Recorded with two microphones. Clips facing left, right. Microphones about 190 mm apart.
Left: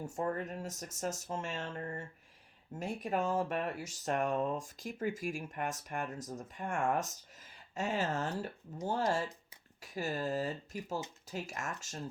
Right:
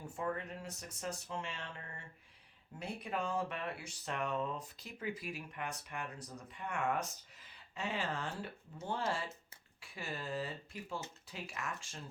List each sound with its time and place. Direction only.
0.0 s speech: 45° left (ahead or behind)